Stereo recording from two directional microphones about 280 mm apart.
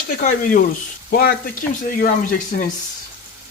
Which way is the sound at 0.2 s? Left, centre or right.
Left.